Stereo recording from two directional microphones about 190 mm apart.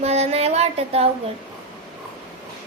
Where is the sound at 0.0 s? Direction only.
35° right (ahead or behind).